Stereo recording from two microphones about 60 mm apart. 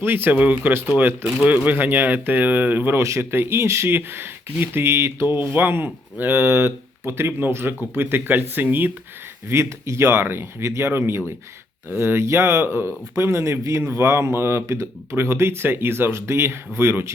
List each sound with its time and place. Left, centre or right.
0.0 s speech: right
9.5 s speech: right